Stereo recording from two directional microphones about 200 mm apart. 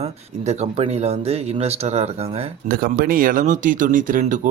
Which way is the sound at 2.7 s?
45° right (ahead or behind).